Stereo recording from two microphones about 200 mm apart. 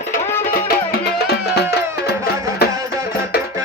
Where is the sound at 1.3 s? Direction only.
55° left (ahead or behind).